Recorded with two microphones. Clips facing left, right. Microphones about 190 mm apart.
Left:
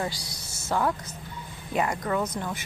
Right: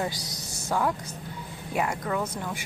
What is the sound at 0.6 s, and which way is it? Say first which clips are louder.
A woman's voice: left 1 dB; centre (ahead or behind).